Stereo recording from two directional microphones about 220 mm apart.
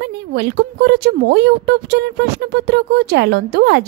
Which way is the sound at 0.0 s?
50° right (ahead or behind).